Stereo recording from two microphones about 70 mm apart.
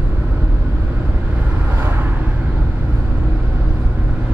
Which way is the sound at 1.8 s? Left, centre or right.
Right.